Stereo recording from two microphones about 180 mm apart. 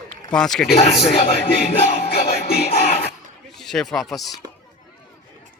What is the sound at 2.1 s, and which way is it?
Music, 60° left (ahead or behind).